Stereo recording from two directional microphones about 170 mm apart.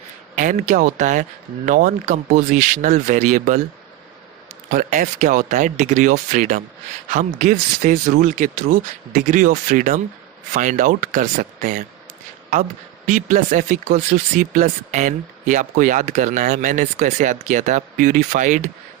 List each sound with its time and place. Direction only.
0.3 s speech: 45° right (ahead or behind)
4.7 s speech: 50° right (ahead or behind)
13.1 s speech: 50° right (ahead or behind)